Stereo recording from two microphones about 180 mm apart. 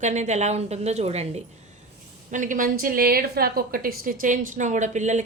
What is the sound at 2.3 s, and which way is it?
A woman's voice, 45° right (ahead or behind).